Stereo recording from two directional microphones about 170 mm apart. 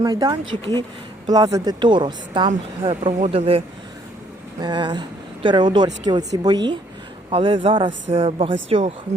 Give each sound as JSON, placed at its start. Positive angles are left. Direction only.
{"t": 0.0, "sound": "speech", "side_deg": -20}
{"t": 4.6, "sound": "speech", "side_deg": -25}